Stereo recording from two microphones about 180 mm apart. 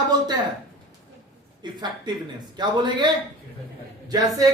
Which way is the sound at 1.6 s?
25° right (ahead or behind).